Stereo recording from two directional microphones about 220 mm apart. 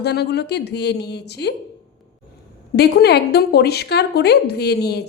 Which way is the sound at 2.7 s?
45° left (ahead or behind).